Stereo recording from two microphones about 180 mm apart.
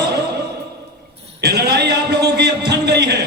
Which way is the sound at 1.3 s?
65° right (ahead or behind).